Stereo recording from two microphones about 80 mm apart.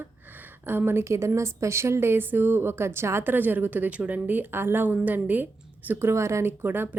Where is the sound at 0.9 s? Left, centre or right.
Right.